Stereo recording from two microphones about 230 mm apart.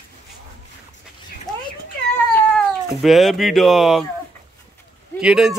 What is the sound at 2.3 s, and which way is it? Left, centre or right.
Speech, centre.